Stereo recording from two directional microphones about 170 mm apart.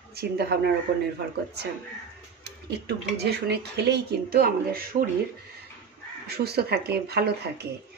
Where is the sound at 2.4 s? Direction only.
75° right (ahead or behind).